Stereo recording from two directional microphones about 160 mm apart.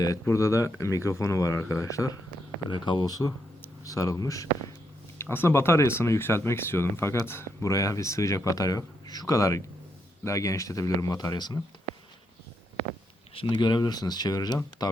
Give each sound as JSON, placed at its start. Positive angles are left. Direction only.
{"t": 0.0, "sound": "speech", "side_deg": 20}
{"t": 13.3, "sound": "speech", "side_deg": 30}